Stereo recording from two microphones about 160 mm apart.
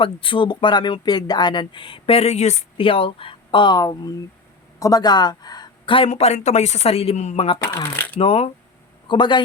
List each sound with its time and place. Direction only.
0.0 s speech: 30° left (ahead or behind)
7.6 s speech: 15° left (ahead or behind)
8.2 s a man's voice: 35° left (ahead or behind)